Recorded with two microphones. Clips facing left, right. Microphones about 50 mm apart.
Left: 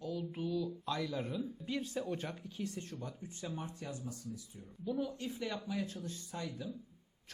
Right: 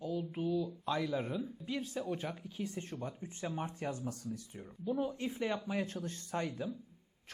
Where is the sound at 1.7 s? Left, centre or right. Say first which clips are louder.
Even; centre.